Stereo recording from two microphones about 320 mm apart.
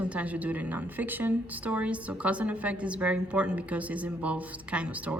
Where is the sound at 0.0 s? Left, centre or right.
Centre.